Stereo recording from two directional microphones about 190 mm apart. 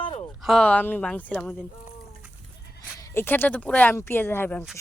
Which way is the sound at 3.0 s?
15° left (ahead or behind).